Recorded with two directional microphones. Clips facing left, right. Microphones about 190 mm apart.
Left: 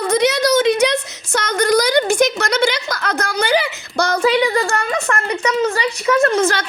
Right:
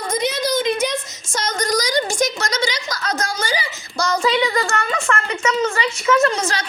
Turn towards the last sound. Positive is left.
turn(degrees=55)  # may be behind; listen again after turning